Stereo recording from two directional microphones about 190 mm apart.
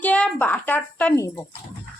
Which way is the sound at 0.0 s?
5° left (ahead or behind).